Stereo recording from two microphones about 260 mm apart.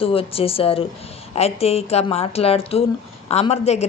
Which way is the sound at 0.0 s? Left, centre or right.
Left.